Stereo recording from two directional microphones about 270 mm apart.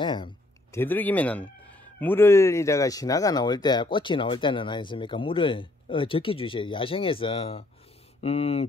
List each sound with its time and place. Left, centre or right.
0.0 s speech: centre